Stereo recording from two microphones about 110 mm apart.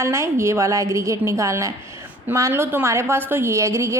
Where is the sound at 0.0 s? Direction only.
25° right (ahead or behind).